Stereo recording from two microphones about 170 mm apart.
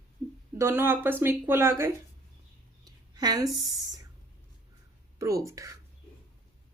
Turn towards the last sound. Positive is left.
turn(degrees=-20)  # may be behind; listen again after turning